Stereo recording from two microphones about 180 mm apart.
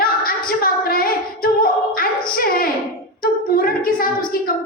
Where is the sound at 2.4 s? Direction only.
55° left (ahead or behind).